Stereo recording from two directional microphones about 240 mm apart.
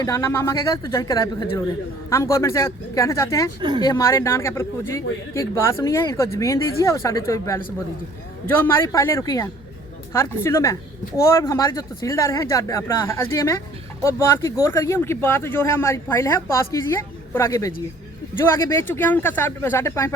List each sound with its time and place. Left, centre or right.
0.0 s speech: centre
3.6 s speech: centre
3.8 s speech: centre